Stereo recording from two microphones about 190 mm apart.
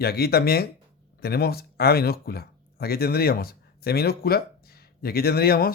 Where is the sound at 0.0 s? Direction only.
55° left (ahead or behind).